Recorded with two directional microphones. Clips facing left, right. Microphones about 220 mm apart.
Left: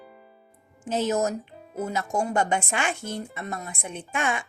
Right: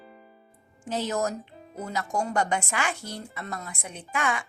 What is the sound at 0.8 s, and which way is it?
Speech, 20° left (ahead or behind).